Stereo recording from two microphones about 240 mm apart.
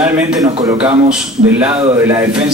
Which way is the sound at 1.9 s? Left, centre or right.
Centre.